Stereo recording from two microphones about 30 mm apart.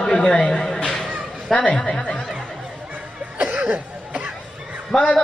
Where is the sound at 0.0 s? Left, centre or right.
Left.